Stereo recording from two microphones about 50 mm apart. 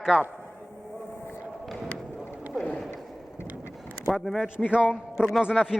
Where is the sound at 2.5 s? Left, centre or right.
Centre.